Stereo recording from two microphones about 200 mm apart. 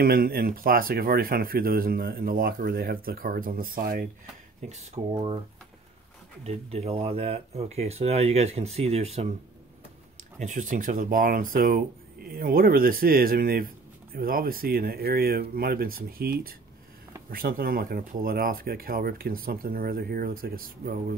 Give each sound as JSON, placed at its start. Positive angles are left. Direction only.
{"t": 0.0, "sound": "speech", "side_deg": -45}
{"t": 4.6, "sound": "speech", "side_deg": -35}
{"t": 6.4, "sound": "speech", "side_deg": -30}
{"t": 10.4, "sound": "speech", "side_deg": -40}